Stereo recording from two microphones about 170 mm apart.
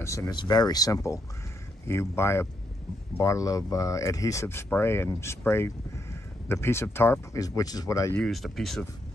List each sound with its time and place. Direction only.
0.0 s speech: 20° left (ahead or behind)
8.2 s speech: centre (ahead or behind)